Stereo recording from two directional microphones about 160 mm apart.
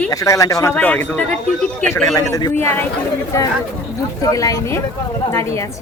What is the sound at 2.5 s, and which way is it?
Speech, 15° left (ahead or behind).